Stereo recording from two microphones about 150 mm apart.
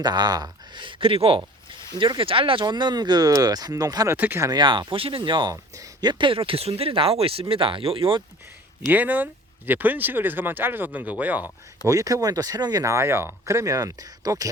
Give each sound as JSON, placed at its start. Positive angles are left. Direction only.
{"t": 0.0, "sound": "speech", "side_deg": -25}
{"t": 8.9, "sound": "speech", "side_deg": -10}
{"t": 11.9, "sound": "speech", "side_deg": -20}